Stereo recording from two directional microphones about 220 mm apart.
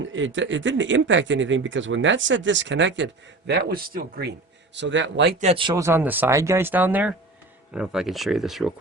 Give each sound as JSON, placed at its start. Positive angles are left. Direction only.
{"t": 0.0, "sound": "speech", "side_deg": -60}
{"t": 5.4, "sound": "speech", "side_deg": -25}